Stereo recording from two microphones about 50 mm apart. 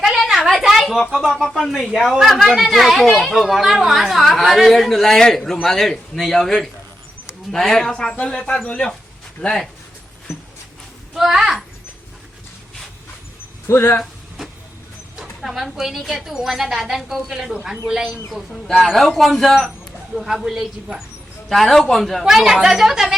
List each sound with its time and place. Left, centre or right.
0.0 s a sound: centre
1.4 s speech: centre
1.9 s a woman's voice: centre; by 8.8 s left
11.1 s speech: centre
13.7 s speech: left
15.1 s speech: centre
18.5 s a woman's voice: centre
21.5 s a woman's voice: centre
22.2 s speech: centre